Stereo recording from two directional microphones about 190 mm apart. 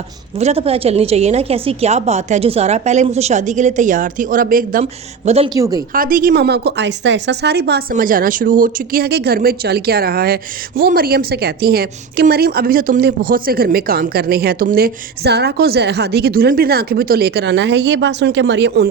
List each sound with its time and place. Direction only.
0.3 s a woman's voice: 30° right (ahead or behind)
5.9 s a woman's voice: 50° right (ahead or behind); by 18.9 s 65° right (ahead or behind)